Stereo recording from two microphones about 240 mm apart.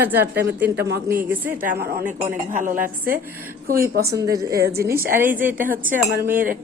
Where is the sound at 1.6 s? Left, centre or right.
Right.